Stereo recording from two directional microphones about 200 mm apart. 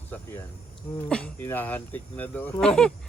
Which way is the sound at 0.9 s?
5° left (ahead or behind).